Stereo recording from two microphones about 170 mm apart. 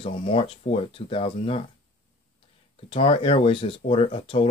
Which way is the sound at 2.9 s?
35° left (ahead or behind).